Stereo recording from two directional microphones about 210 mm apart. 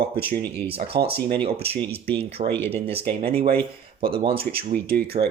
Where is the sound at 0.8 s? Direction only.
50° right (ahead or behind).